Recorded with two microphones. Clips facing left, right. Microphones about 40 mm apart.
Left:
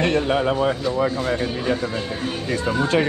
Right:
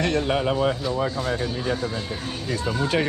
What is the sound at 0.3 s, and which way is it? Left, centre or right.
Speech, centre.